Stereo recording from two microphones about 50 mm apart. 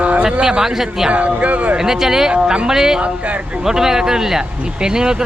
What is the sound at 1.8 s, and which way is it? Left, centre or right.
A man's voice, centre.